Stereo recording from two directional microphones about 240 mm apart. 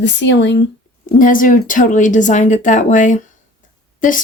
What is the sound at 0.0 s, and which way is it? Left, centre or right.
Speech, left.